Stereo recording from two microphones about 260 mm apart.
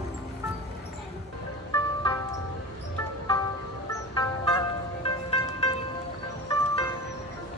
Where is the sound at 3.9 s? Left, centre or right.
Centre.